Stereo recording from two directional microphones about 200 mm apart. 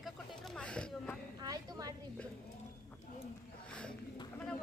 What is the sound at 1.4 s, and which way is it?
Speech, 20° right (ahead or behind).